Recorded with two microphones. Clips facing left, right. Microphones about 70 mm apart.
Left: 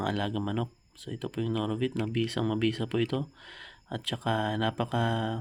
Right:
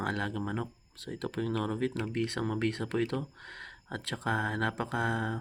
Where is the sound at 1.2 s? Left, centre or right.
Right.